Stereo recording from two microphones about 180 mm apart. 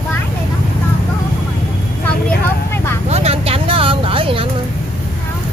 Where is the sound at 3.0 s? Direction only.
35° right (ahead or behind).